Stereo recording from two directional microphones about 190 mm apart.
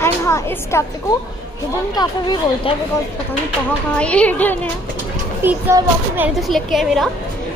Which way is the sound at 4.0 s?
5° left (ahead or behind).